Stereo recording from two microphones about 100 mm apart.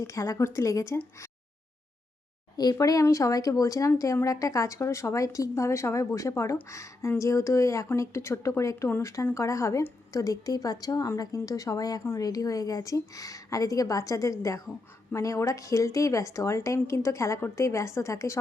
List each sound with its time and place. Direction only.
0.0 s a woman's voice: 30° left (ahead or behind)
2.6 s speech: 40° left (ahead or behind)